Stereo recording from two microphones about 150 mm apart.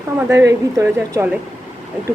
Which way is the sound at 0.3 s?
20° right (ahead or behind).